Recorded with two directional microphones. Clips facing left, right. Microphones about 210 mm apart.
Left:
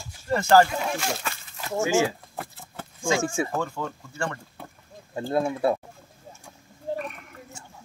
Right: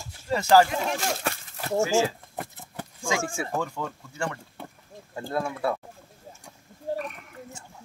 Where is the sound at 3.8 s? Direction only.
10° left (ahead or behind).